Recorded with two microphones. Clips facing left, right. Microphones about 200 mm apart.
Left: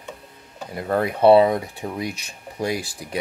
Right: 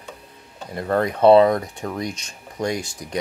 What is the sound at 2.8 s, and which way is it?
Speech, 35° left (ahead or behind).